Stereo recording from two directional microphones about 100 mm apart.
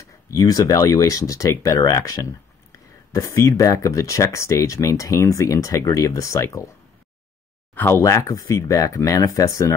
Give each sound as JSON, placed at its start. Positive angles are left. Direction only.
{"t": 0.3, "sound": "speech", "side_deg": 40}
{"t": 7.7, "sound": "speech", "side_deg": 20}
{"t": 8.0, "sound": "speech", "side_deg": 30}